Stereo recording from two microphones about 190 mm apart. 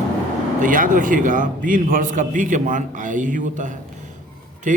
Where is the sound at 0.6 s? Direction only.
45° right (ahead or behind).